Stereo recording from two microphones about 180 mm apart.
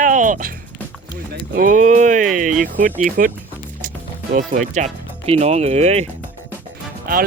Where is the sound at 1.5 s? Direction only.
45° right (ahead or behind).